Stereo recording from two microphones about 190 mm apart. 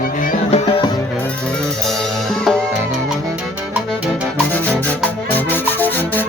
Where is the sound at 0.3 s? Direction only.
35° left (ahead or behind).